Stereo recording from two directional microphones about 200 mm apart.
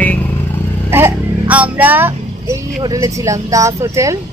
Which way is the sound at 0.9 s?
10° right (ahead or behind).